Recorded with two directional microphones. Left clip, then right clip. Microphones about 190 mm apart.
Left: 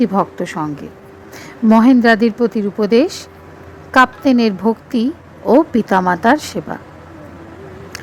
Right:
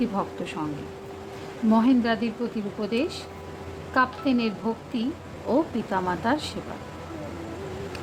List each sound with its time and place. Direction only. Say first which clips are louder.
0.0 s speech: left 12 dB; 40° left (ahead or behind)
1.7 s a woman's voice: left 12 dB; 45° left (ahead or behind)